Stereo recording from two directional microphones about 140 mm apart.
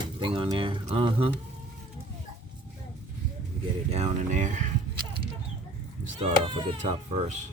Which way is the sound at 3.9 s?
55° right (ahead or behind).